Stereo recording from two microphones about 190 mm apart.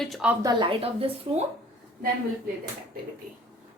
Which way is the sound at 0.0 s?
Centre (ahead or behind).